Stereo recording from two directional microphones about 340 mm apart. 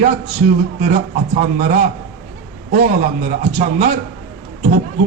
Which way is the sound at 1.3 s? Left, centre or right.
Right.